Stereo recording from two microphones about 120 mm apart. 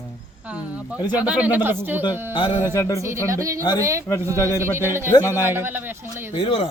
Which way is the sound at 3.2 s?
25° right (ahead or behind).